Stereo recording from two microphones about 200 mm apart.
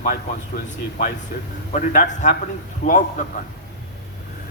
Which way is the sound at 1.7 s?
40° left (ahead or behind).